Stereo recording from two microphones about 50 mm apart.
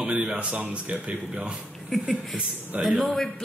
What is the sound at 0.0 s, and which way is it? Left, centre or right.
Speech, centre.